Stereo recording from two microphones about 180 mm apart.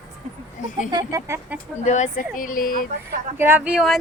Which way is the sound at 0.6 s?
45° left (ahead or behind).